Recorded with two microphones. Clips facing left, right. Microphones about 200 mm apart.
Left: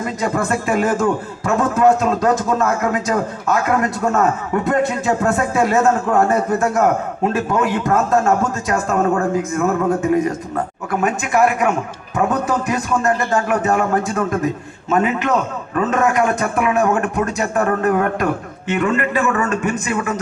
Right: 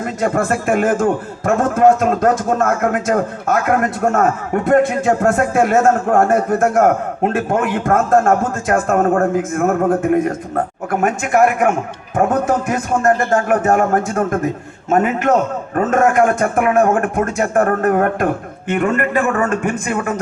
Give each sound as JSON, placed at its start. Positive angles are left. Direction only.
{"t": 0.0, "sound": "a man's voice", "side_deg": -50}